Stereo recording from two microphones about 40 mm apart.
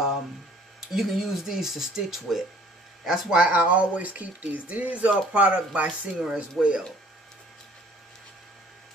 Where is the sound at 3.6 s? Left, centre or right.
Right.